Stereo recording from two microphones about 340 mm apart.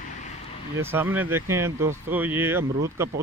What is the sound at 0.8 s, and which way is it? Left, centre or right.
Speech, centre.